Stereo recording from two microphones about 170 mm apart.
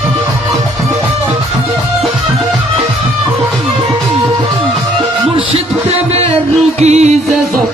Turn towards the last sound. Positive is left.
turn(degrees=-40)  # may be behind; listen again after turning